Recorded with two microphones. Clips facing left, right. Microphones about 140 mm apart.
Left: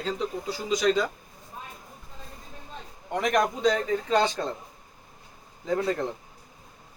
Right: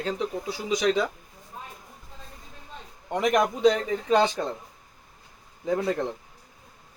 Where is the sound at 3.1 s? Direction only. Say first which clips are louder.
Right 2 dB; 15° right (ahead or behind).